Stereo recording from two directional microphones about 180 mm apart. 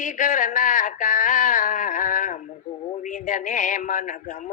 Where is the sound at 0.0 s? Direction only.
45° left (ahead or behind).